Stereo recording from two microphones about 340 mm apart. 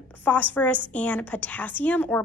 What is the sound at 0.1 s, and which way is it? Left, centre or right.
A woman's voice, centre.